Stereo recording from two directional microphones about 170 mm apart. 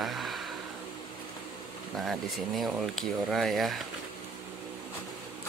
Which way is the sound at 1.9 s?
Centre (ahead or behind).